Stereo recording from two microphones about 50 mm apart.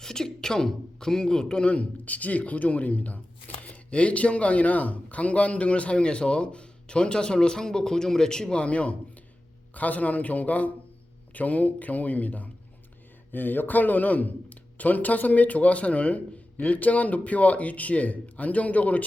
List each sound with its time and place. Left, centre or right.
0.0 s a man's voice: centre; by 19.0 s left